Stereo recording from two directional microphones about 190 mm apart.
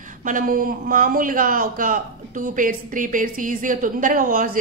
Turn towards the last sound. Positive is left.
turn(degrees=-45)  # may be behind; listen again after turning